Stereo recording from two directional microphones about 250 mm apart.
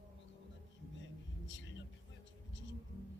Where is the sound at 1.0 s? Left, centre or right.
Left.